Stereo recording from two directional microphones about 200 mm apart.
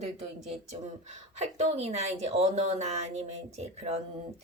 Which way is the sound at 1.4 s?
35° right (ahead or behind).